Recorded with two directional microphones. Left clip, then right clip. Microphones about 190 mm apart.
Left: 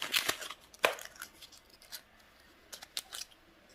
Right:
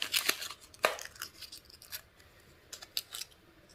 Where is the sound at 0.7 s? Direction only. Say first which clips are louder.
Left 1 dB; 25° left (ahead or behind).